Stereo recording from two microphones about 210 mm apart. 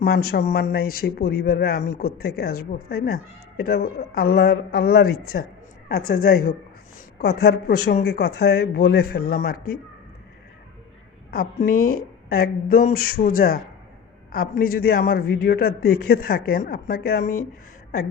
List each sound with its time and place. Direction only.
0.0 s a man's voice: 45° left (ahead or behind)
11.3 s a man's voice: 45° left (ahead or behind)